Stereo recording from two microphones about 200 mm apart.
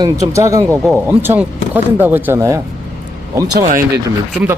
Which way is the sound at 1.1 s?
10° right (ahead or behind).